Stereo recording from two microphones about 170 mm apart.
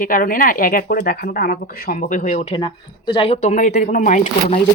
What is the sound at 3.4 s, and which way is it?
Speech, 45° left (ahead or behind).